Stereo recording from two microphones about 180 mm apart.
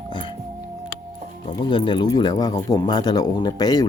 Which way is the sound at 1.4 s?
25° left (ahead or behind).